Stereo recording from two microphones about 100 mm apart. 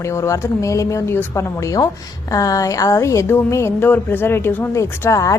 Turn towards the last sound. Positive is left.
turn(degrees=30)  # may be behind; listen again after turning